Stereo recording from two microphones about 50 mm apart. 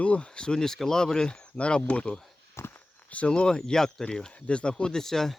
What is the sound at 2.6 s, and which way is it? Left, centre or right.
Walk, left.